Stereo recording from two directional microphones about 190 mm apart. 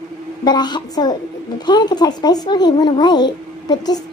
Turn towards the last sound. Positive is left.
turn(degrees=20)  # may be behind; listen again after turning